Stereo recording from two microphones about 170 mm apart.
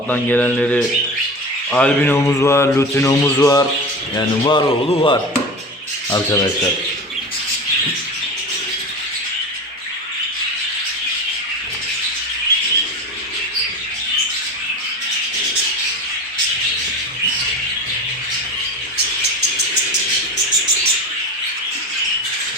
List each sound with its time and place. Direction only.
0.1 s speech: 10° left (ahead or behind)